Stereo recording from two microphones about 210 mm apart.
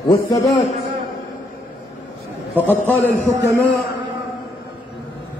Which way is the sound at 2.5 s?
10° left (ahead or behind).